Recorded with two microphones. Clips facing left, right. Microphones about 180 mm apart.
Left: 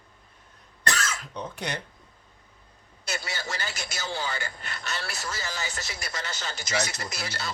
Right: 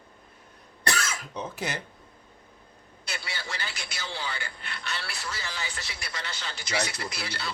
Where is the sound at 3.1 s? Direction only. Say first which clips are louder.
Left 4 dB; 45° left (ahead or behind).